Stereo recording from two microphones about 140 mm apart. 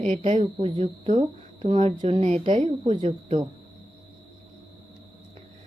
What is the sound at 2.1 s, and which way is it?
Speech, 40° right (ahead or behind).